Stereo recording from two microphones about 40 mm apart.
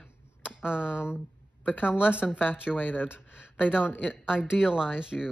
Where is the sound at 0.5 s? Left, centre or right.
Right.